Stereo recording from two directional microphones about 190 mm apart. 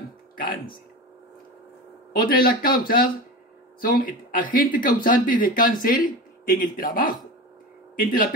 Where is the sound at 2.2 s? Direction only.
50° left (ahead or behind).